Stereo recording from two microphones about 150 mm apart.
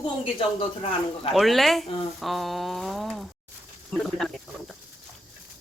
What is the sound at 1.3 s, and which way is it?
Speech, centre (ahead or behind).